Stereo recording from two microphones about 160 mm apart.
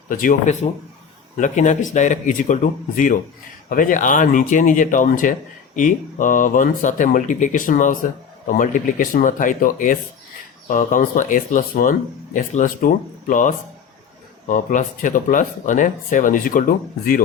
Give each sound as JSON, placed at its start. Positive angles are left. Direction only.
{"t": 0.1, "sound": "speech", "side_deg": 55}